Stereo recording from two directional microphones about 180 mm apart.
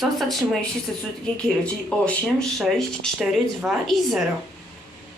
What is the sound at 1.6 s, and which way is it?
Speech, 5° left (ahead or behind).